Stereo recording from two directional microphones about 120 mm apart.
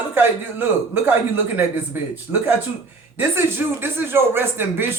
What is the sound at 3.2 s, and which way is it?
Speech, 15° right (ahead or behind).